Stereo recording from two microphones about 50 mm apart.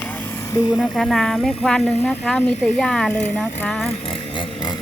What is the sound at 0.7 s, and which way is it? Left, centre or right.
Speech, centre.